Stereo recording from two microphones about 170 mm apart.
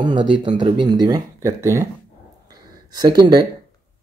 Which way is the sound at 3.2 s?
25° right (ahead or behind).